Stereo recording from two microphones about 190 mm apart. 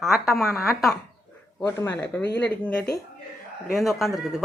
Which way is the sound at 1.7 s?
15° left (ahead or behind).